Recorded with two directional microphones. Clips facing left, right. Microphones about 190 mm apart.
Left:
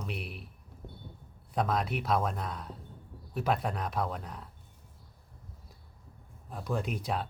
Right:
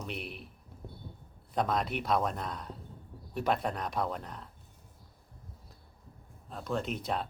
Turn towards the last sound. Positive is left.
turn(degrees=5)  # may be behind; listen again after turning